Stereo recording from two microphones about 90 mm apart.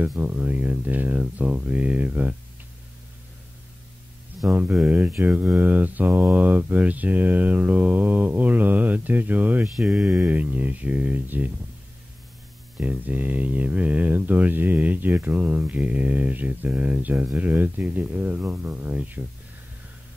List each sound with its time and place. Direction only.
0.2 s speech: 20° right (ahead or behind)
4.4 s speech: 20° right (ahead or behind)
9.8 s speech: 5° right (ahead or behind)
10.1 s speech: 20° right (ahead or behind)
12.8 s speech: 20° right (ahead or behind)